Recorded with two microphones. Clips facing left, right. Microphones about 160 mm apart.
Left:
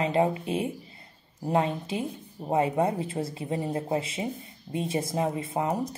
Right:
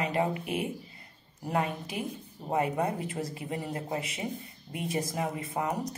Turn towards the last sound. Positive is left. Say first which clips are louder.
# left 4 dB
turn(degrees=25)  # may be behind; listen again after turning